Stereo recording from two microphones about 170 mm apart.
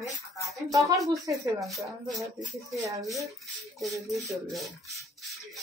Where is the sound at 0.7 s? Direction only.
20° right (ahead or behind).